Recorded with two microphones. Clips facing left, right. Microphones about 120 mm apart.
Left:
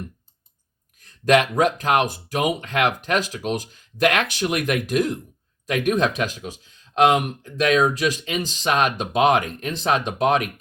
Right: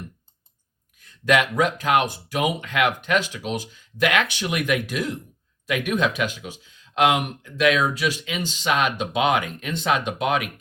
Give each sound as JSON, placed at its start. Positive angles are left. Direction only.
{"t": 1.0, "sound": "speech", "side_deg": 40}